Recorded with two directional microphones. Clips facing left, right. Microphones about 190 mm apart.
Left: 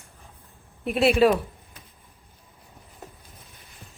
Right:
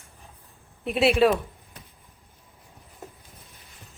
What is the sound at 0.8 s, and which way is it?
Speech, centre (ahead or behind).